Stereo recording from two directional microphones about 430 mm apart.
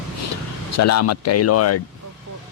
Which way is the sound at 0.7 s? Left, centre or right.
Left.